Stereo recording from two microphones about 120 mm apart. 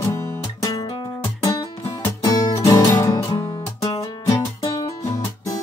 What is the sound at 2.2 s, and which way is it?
Music, 30° left (ahead or behind).